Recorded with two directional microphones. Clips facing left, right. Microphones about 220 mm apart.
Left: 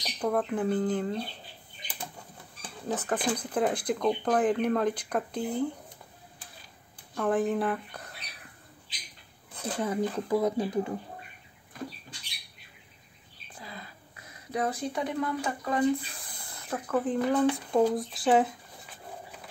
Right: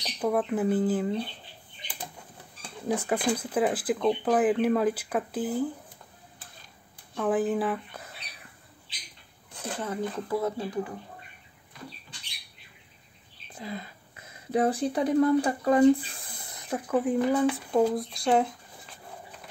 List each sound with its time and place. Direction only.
0.0 s speech: 5° right (ahead or behind)
2.9 s speech: 10° right (ahead or behind)
7.2 s speech: centre (ahead or behind)
9.8 s speech: 15° left (ahead or behind)
13.6 s whispering: 25° right (ahead or behind)
14.5 s speech: 30° right (ahead or behind)
16.4 s speech: 15° right (ahead or behind); by 18.9 s 5° left (ahead or behind)